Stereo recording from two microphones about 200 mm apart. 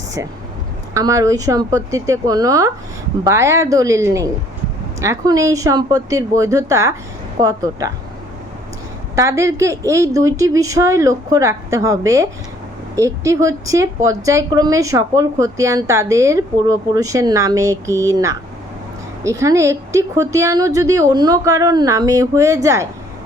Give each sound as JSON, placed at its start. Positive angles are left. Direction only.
{"t": 0.9, "sound": "a woman's voice", "side_deg": -15}
{"t": 9.1, "sound": "a woman's voice", "side_deg": -15}